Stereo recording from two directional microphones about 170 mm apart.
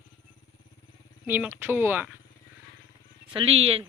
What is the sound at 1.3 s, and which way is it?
Speech, 10° right (ahead or behind).